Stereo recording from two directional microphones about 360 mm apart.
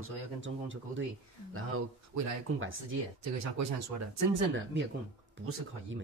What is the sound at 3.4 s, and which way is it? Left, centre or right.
Speech, right.